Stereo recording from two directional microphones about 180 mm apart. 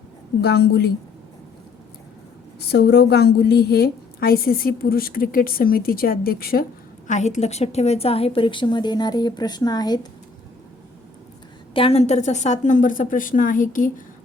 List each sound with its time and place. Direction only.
0.4 s a woman's voice: 60° left (ahead or behind)
2.6 s a woman's voice: 65° left (ahead or behind)
7.1 s a woman's voice: 40° left (ahead or behind); by 10.1 s 20° left (ahead or behind)
11.7 s a woman's voice: 30° left (ahead or behind); by 13.9 s 50° left (ahead or behind)